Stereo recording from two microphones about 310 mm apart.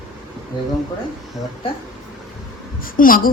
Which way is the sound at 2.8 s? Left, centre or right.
Left.